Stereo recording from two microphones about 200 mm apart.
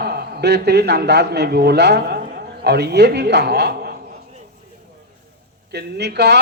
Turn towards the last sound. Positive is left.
turn(degrees=-55)  # may be behind; listen again after turning